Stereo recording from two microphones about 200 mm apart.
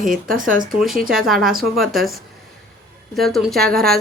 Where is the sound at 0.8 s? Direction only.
Centre (ahead or behind).